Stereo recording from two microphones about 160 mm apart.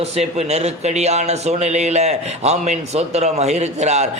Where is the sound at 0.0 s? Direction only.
40° right (ahead or behind).